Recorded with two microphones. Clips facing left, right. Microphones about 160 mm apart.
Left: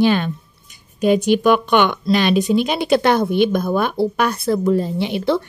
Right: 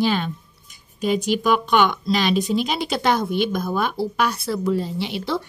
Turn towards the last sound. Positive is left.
turn(degrees=55)  # may be behind; listen again after turning